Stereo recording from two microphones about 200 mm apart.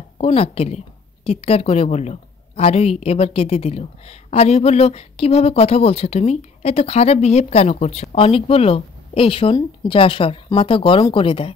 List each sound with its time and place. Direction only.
0.2 s a woman's voice: 30° left (ahead or behind)